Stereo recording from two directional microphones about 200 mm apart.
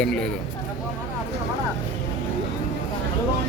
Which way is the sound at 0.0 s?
5° left (ahead or behind).